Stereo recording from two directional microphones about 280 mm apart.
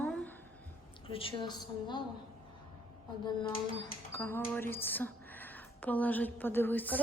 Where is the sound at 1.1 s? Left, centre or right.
Centre.